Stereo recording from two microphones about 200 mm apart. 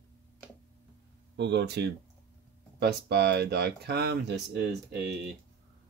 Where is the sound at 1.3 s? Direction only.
60° right (ahead or behind).